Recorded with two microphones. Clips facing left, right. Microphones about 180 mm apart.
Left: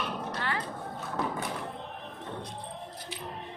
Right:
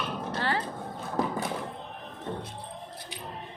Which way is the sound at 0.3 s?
30° right (ahead or behind).